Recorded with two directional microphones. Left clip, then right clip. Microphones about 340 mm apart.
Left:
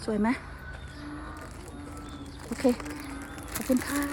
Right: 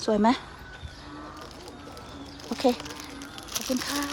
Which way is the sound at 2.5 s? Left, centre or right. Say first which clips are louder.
Right 2 dB; centre.